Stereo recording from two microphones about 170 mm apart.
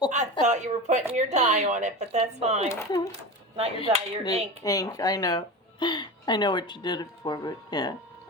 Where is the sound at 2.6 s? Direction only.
20° left (ahead or behind).